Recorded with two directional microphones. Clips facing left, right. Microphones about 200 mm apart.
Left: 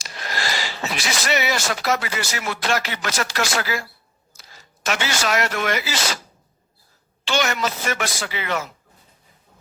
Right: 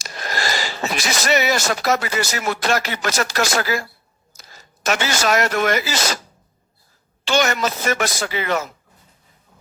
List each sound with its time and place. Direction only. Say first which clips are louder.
0.0 s speech: right 3 dB; 45° right (ahead or behind)
7.3 s speech: right 3 dB; 45° right (ahead or behind)